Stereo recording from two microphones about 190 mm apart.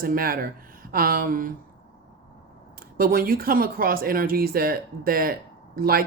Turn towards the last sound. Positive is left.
turn(degrees=-50)  # may be behind; listen again after turning